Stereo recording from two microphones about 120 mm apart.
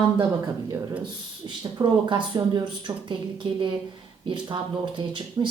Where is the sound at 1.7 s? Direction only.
35° right (ahead or behind).